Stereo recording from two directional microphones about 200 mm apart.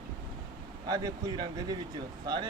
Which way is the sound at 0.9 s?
20° right (ahead or behind).